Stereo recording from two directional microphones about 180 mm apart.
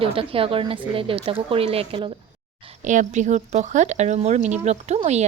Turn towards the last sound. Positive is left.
turn(degrees=-40)  # may be behind; listen again after turning